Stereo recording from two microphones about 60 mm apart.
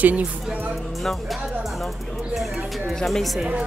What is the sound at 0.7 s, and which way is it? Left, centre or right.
A woman's voice, centre.